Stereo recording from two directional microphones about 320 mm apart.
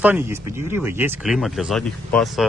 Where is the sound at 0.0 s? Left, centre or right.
Centre.